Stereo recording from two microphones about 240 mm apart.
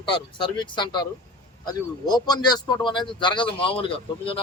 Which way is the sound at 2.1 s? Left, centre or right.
Centre.